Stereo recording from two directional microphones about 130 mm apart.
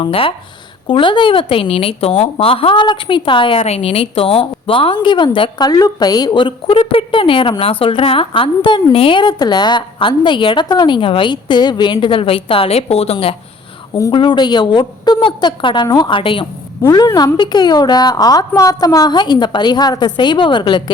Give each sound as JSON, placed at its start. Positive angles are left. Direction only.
{"t": 0.0, "sound": "speech", "side_deg": 45}
{"t": 14.1, "sound": "speech", "side_deg": 40}
{"t": 16.8, "sound": "a woman's voice", "side_deg": 25}